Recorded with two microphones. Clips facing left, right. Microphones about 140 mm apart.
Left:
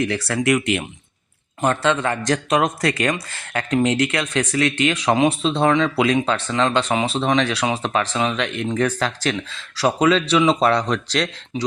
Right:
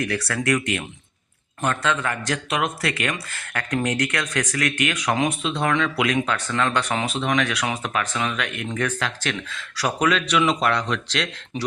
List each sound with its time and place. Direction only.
0.0 s speech: 25° left (ahead or behind)
2.2 s speech: 40° left (ahead or behind)